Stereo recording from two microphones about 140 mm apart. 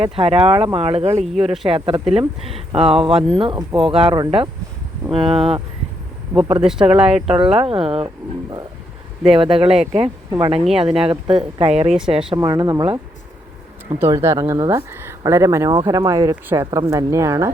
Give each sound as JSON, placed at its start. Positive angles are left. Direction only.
{"t": 0.2, "sound": "speech", "side_deg": -45}
{"t": 1.2, "sound": "speech", "side_deg": 0}
{"t": 1.8, "sound": "speech", "side_deg": -40}
{"t": 6.6, "sound": "speech", "side_deg": -5}
{"t": 7.3, "sound": "speech", "side_deg": -40}
{"t": 8.0, "sound": "speech", "side_deg": -30}
{"t": 11.9, "sound": "speech", "side_deg": -5}
{"t": 12.4, "sound": "speech", "side_deg": -30}
{"t": 14.2, "sound": "speech", "side_deg": -20}
{"t": 14.9, "sound": "speech", "side_deg": -20}